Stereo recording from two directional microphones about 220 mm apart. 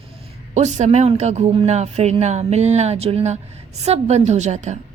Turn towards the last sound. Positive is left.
turn(degrees=-30)  # may be behind; listen again after turning